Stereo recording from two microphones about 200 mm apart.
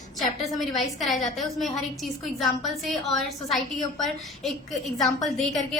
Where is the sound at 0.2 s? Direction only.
Centre (ahead or behind).